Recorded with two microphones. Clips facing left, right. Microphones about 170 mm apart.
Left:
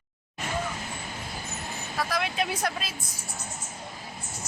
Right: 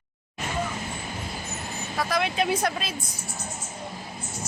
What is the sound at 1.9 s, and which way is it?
Speech, centre (ahead or behind).